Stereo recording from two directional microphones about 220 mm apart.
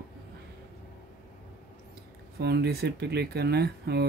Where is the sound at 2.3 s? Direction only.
45° right (ahead or behind).